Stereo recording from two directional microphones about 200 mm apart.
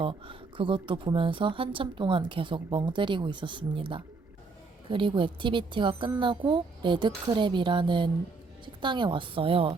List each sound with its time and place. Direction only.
0.0 s speech: 25° right (ahead or behind)